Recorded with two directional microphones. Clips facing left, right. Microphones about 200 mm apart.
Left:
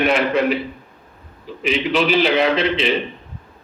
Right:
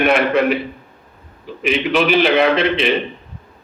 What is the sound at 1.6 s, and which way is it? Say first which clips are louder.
A man's voice: right 2 dB; 55° right (ahead or behind).